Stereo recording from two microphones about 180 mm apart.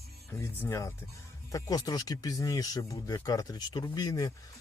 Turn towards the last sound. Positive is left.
turn(degrees=20)  # may be behind; listen again after turning